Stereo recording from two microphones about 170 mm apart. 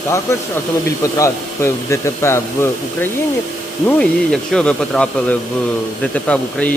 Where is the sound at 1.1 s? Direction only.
15° left (ahead or behind).